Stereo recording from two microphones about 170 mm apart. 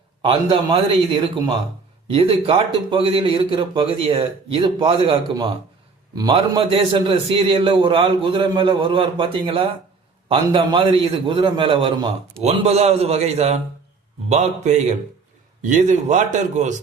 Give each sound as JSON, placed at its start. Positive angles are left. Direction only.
{"t": 0.2, "sound": "a man's voice", "side_deg": -30}